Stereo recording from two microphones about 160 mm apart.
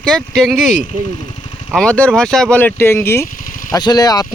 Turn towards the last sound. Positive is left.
turn(degrees=25)  # may be behind; listen again after turning